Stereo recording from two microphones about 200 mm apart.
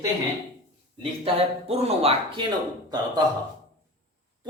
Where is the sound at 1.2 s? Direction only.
30° right (ahead or behind).